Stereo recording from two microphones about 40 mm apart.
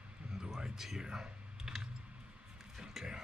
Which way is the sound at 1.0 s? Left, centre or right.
Centre.